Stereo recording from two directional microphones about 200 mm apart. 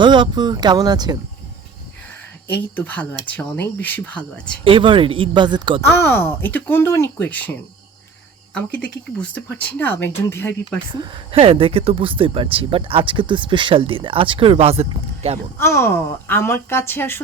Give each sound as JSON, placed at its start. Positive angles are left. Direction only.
{"t": 0.0, "sound": "speech", "side_deg": -25}
{"t": 2.5, "sound": "speech", "side_deg": 10}
{"t": 4.6, "sound": "speech", "side_deg": -25}
{"t": 5.8, "sound": "speech", "side_deg": 10}
{"t": 8.5, "sound": "speech", "side_deg": 5}
{"t": 10.9, "sound": "speech", "side_deg": -25}
{"t": 15.5, "sound": "speech", "side_deg": 15}